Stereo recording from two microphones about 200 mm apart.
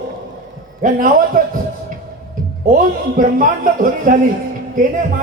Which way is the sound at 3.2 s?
45° right (ahead or behind).